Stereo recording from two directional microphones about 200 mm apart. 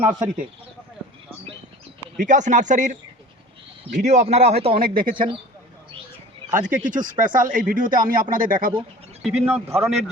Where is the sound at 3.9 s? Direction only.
35° right (ahead or behind).